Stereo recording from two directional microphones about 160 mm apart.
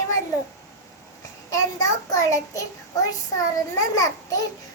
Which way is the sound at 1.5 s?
20° left (ahead or behind).